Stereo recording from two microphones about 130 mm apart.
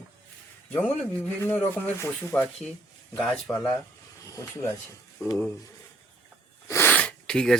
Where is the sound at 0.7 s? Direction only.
15° left (ahead or behind).